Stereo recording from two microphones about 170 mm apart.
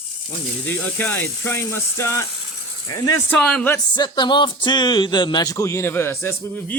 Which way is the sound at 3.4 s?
5° left (ahead or behind).